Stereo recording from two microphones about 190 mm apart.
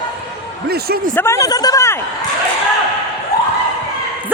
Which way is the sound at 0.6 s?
55° right (ahead or behind).